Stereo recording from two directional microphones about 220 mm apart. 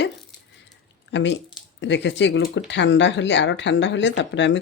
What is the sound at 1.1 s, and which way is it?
Speech, 55° left (ahead or behind).